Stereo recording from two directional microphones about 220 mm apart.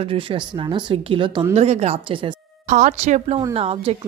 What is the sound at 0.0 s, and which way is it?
Speech, 25° right (ahead or behind).